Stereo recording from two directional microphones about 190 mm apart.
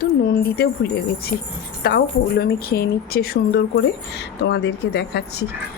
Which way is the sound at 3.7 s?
65° left (ahead or behind).